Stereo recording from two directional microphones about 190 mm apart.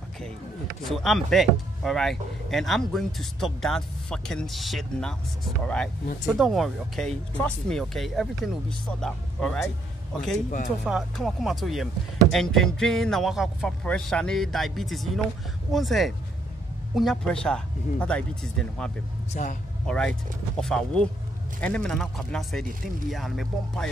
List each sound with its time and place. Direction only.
0.8 s speech: centre (ahead or behind)
10.9 s speech: centre (ahead or behind)
19.3 s speech: 45° left (ahead or behind)
19.9 s speech: 5° left (ahead or behind)